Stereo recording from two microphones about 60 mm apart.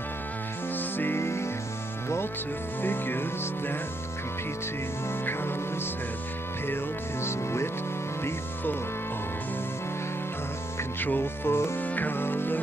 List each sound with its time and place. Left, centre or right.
0.9 s music: left
2.8 s music: left
7.2 s speech: left
11.0 s music: left
11.8 s music: left